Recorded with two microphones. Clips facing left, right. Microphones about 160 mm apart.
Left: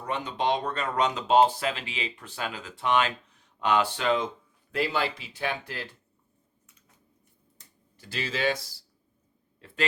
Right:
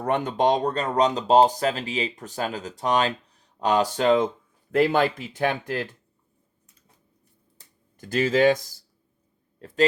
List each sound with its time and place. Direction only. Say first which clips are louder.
0.0 s speech: right 7 dB; 55° right (ahead or behind)
7.9 s speech: right 12 dB; 45° right (ahead or behind)
9.6 s a sound: right 9 dB; 40° right (ahead or behind)